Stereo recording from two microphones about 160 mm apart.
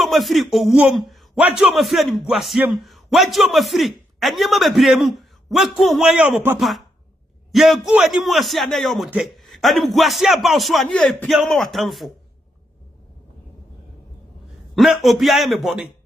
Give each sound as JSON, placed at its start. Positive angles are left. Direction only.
{"t": 0.0, "sound": "a man's voice", "side_deg": 0}
{"t": 14.8, "sound": "a man's voice", "side_deg": 0}